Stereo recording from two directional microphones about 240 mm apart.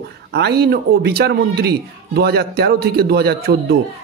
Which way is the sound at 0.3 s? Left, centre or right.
Right.